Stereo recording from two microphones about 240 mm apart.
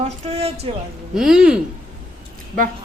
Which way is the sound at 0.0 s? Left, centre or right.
Right.